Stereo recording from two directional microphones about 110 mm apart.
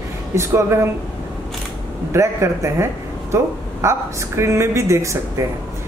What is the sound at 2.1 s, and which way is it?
Speech, 25° right (ahead or behind).